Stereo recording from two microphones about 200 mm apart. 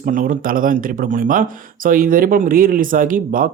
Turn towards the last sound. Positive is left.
turn(degrees=-45)  # may be behind; listen again after turning